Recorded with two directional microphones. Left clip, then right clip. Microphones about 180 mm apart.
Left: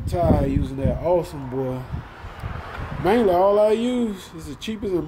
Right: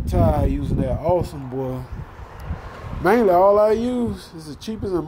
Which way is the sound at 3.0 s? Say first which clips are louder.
Right 3 dB; 10° right (ahead or behind).